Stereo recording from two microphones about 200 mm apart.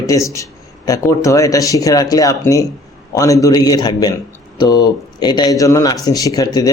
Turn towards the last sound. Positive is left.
turn(degrees=20)  # may be behind; listen again after turning